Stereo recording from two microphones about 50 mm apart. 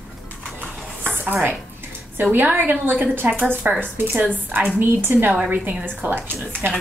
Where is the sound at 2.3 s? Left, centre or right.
Right.